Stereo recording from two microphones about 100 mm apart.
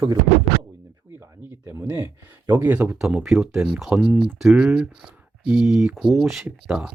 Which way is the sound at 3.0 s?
5° right (ahead or behind).